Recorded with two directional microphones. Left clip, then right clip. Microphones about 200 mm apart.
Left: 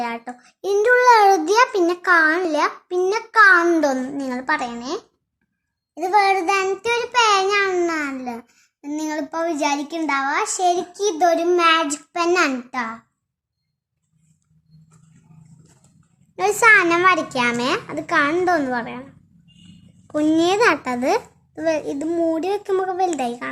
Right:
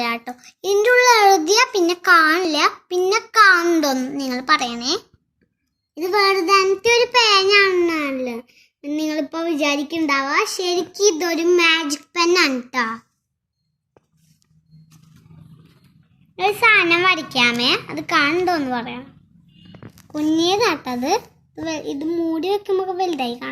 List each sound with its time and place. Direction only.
0.0 s child singing: 5° left (ahead or behind)
0.4 s child singing: 20° left (ahead or behind)
5.9 s a child's voice: 25° left (ahead or behind)
16.3 s a child's voice: 40° left (ahead or behind)
20.1 s a child's voice: 40° left (ahead or behind)